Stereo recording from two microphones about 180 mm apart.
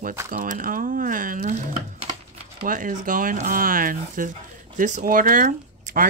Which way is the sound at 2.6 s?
45° right (ahead or behind).